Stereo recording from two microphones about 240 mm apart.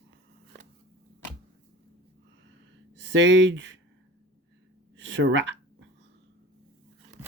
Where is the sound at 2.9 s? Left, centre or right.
Right.